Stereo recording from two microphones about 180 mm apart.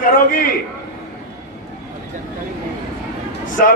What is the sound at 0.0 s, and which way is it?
Speech, 50° left (ahead or behind).